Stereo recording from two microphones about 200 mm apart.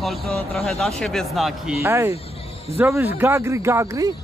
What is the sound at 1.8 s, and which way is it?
Speech, 15° right (ahead or behind).